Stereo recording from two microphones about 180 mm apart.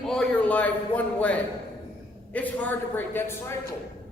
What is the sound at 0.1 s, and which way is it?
A man's voice, 5° left (ahead or behind).